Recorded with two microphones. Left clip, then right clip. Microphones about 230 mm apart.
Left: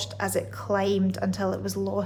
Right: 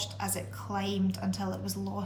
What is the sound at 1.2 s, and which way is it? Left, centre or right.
Speech, left.